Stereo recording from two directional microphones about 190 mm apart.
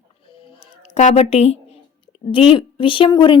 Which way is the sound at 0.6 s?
35° left (ahead or behind).